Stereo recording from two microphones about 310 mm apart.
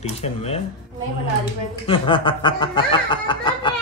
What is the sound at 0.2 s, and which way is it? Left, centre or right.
Speech, centre.